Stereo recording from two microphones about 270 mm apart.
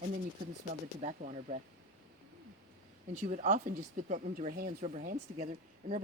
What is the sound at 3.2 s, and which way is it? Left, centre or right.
Speech, right.